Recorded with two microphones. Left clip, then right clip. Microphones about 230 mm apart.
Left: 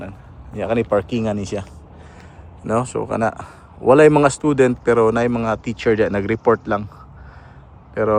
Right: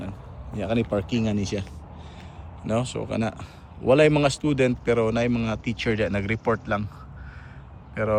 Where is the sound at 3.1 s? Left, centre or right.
Left.